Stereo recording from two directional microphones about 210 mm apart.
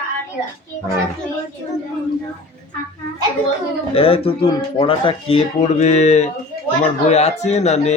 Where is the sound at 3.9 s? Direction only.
25° left (ahead or behind).